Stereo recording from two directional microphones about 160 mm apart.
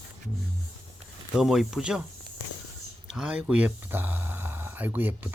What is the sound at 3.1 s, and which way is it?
Speech, 5° right (ahead or behind).